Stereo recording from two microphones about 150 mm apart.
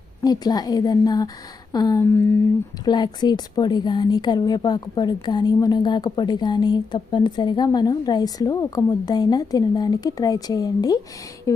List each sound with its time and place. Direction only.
0.2 s speech: 25° left (ahead or behind)